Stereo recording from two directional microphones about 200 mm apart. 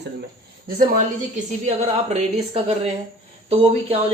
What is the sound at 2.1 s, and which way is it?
Speech, 30° right (ahead or behind).